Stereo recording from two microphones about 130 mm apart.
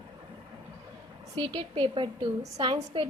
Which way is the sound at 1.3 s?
40° right (ahead or behind).